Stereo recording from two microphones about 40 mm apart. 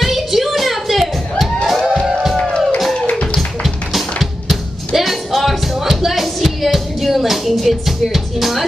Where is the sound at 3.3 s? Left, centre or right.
Centre.